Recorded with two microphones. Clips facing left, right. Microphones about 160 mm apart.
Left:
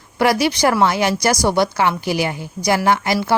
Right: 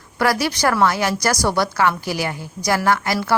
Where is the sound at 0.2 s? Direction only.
20° left (ahead or behind).